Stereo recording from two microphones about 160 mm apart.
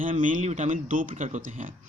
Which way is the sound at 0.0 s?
55° right (ahead or behind).